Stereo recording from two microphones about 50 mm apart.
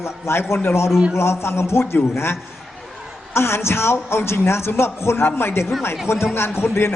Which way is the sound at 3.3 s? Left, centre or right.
Left.